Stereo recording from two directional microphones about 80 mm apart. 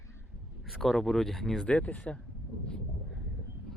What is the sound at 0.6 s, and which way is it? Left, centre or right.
Speech, centre.